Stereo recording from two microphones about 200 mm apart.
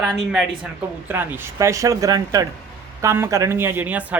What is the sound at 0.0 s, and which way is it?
A man's voice, centre (ahead or behind).